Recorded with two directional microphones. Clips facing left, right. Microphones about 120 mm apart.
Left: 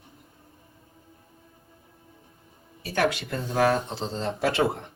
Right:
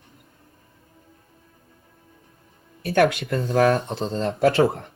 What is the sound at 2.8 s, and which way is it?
Speech, 55° right (ahead or behind).